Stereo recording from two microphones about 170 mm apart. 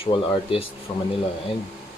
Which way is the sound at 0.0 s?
30° left (ahead or behind).